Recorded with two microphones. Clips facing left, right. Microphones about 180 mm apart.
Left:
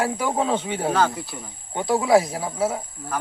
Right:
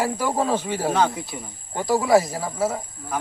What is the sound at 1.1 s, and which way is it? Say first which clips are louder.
Speech: right 1 dB; 15° right (ahead or behind).